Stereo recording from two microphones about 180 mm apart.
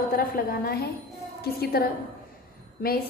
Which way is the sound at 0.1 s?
55° left (ahead or behind).